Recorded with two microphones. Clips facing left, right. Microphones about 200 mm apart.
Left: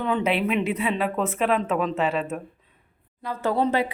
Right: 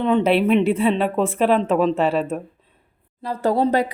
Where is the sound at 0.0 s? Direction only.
25° right (ahead or behind).